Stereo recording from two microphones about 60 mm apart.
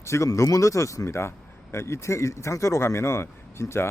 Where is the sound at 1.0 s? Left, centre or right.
Left.